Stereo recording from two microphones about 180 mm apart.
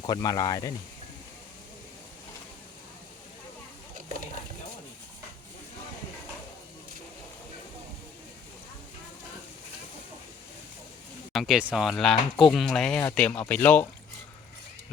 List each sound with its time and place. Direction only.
0.0 s speech: 20° left (ahead or behind)
11.3 s speech: centre (ahead or behind)